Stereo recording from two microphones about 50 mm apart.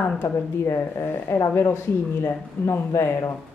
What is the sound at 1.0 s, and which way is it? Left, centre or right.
Speech, left.